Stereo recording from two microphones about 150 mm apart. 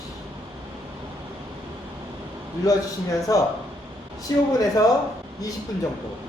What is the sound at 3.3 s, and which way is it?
Speech, 25° left (ahead or behind).